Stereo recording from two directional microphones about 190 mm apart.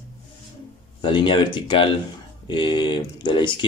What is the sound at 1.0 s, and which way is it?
Speech, 25° left (ahead or behind).